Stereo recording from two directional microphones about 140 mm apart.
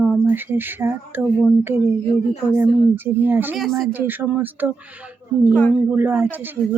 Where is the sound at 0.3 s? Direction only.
15° right (ahead or behind).